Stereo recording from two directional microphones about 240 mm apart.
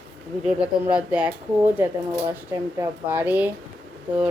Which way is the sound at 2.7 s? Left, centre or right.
Centre.